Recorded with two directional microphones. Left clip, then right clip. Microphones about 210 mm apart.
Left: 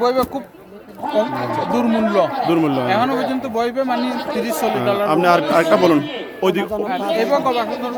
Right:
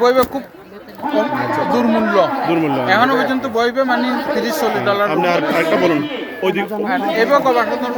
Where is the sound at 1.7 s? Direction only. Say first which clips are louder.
Right 2 dB; 25° left (ahead or behind).